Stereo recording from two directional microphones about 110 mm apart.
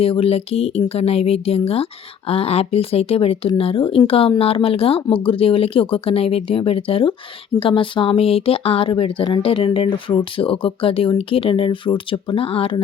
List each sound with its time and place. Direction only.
0.0 s a woman's voice: 60° left (ahead or behind)